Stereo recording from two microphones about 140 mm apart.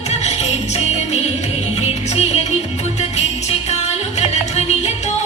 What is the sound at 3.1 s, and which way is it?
Music, 50° left (ahead or behind).